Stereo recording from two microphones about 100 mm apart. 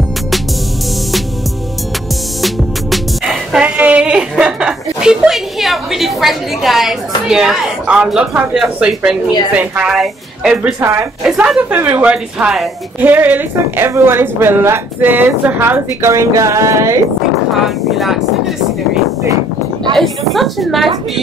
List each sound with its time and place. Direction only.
2.4 s music: centre (ahead or behind)
7.2 s a woman's voice: 5° right (ahead or behind)
10.8 s a woman's voice: 25° right (ahead or behind)
11.2 s a woman's voice: 5° right (ahead or behind); by 17.0 s 30° right (ahead or behind)
17.6 s a woman's voice: centre (ahead or behind)
20.0 s a woman's voice: centre (ahead or behind)